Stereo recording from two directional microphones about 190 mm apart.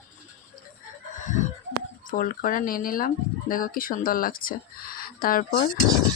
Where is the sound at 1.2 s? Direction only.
40° left (ahead or behind).